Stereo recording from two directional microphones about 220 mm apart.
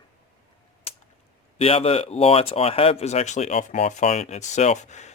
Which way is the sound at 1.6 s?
25° left (ahead or behind).